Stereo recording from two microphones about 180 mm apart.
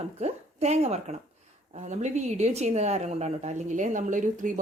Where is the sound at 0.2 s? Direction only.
40° right (ahead or behind).